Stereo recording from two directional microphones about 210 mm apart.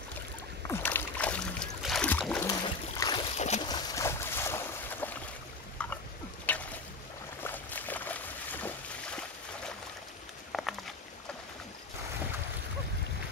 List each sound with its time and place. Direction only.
0.7 s music: 10° left (ahead or behind)
3.0 s boat: 20° left (ahead or behind)
3.3 s boat: 35° left (ahead or behind)
3.6 s boat: 20° left (ahead or behind)
6.5 s boat: 5° left (ahead or behind)
10.5 s a sound: centre (ahead or behind)